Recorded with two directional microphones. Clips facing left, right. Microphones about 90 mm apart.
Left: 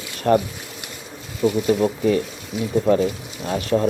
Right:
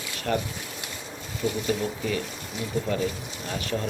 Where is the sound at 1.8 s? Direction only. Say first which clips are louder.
Left 10 dB; 40° left (ahead or behind).